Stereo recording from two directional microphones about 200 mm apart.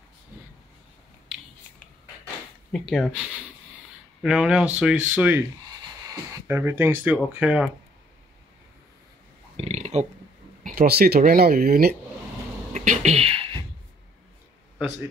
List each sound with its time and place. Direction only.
2.7 s speech: centre (ahead or behind)
4.2 s speech: 5° right (ahead or behind)
9.6 s a sound: 35° right (ahead or behind)
10.6 s speech: 50° right (ahead or behind)
12.7 s beatboxing: 35° right (ahead or behind)